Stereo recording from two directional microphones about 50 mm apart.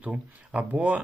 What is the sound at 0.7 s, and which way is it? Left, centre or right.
Speech, right.